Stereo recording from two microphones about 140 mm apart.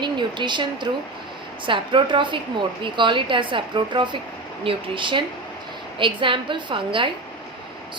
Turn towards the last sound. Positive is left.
turn(degrees=-35)  # may be behind; listen again after turning